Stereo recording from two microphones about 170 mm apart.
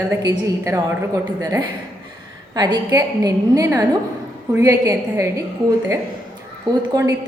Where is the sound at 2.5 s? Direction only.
20° right (ahead or behind).